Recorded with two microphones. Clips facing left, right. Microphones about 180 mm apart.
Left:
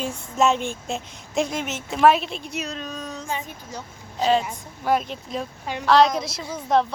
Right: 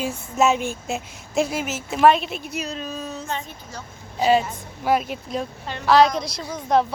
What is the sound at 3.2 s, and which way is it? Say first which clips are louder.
Speech: even; 15° left (ahead or behind).